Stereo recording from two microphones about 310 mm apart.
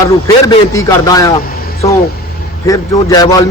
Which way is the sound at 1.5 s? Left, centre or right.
Left.